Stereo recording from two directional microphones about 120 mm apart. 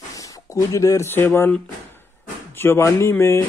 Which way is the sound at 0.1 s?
30° left (ahead or behind).